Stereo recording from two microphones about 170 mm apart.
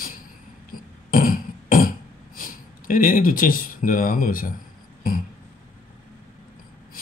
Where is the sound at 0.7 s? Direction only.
60° left (ahead or behind).